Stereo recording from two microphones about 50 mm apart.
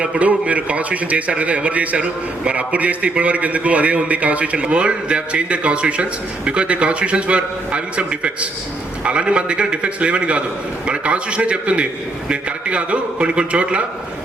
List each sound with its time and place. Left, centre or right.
0.2 s a man's voice: right